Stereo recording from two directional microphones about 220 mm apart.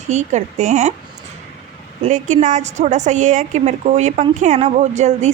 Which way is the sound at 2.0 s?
35° right (ahead or behind).